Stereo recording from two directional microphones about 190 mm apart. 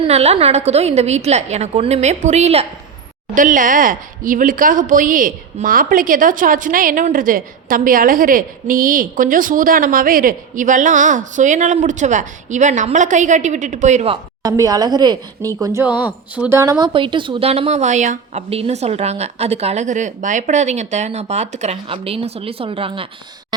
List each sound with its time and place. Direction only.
0.0 s a woman's voice: 35° right (ahead or behind)
14.4 s speech: 20° right (ahead or behind)